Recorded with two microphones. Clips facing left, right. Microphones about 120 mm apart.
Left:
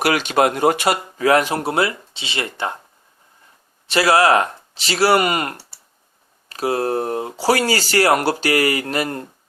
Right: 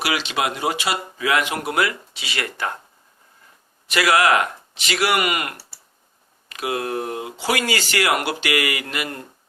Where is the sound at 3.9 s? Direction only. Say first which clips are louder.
Left 3 dB; 30° left (ahead or behind).